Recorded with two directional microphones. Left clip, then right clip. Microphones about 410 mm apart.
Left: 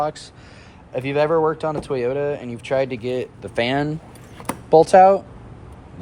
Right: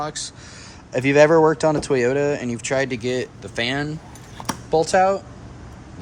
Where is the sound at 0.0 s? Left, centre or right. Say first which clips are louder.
Left 4 dB; centre.